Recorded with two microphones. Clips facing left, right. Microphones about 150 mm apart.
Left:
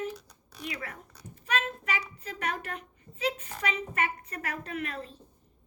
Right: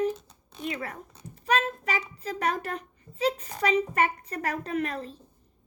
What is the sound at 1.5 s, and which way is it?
A child's voice, 35° right (ahead or behind).